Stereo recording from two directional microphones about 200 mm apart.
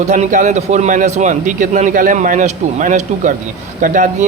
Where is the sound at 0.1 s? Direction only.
40° right (ahead or behind).